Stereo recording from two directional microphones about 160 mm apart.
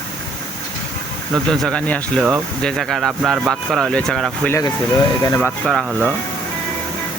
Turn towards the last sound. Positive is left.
turn(degrees=0)  # may be behind; listen again after turning